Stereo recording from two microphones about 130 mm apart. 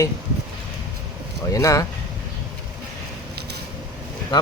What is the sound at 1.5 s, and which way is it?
Speech, 25° left (ahead or behind).